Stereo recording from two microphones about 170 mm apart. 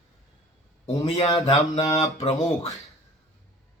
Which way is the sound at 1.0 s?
35° left (ahead or behind).